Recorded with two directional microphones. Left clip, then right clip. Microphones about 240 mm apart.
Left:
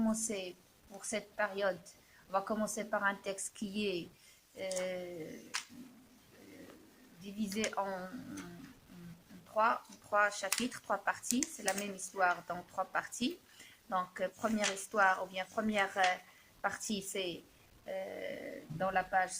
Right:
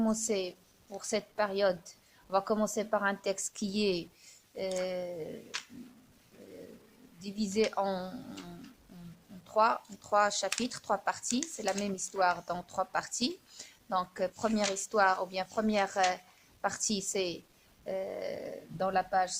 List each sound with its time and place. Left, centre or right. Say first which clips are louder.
0.0 s a woman's voice: right 6 dB; right
7.3 s speech: right 6 dB; right
9.6 s a woman's voice: right 4 dB; right